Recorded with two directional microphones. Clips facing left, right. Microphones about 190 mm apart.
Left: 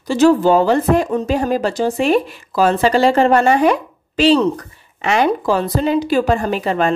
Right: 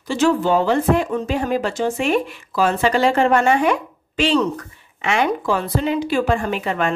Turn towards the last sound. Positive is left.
turn(degrees=35)  # may be behind; listen again after turning